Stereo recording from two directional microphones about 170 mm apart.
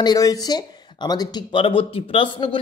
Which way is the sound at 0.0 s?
20° left (ahead or behind).